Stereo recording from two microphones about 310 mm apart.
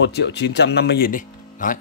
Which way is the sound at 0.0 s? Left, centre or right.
Left.